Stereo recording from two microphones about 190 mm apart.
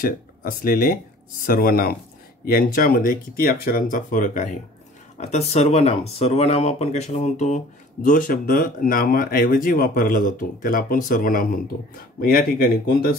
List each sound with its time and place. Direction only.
0.0 s speech: 50° left (ahead or behind)